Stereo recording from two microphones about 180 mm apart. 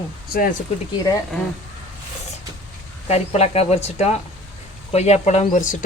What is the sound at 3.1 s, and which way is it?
Speech, 35° left (ahead or behind).